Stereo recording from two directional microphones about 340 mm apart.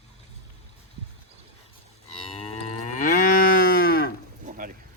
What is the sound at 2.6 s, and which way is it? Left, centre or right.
Moo, left.